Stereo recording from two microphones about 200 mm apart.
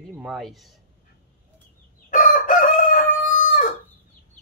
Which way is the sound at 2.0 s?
40° left (ahead or behind).